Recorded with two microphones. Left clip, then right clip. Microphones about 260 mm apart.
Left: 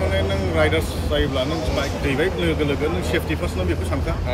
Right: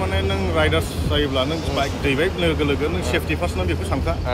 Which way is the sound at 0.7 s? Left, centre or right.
Right.